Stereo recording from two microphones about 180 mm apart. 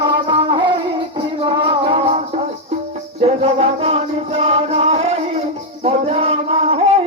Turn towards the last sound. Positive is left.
turn(degrees=-30)  # may be behind; listen again after turning